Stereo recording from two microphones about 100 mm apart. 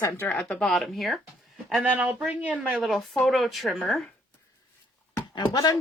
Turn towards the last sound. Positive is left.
turn(degrees=45)  # may be behind; listen again after turning